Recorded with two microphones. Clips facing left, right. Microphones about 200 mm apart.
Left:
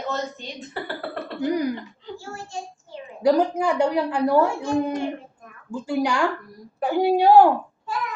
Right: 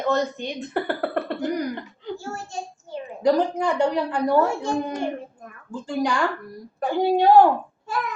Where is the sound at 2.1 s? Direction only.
40° right (ahead or behind).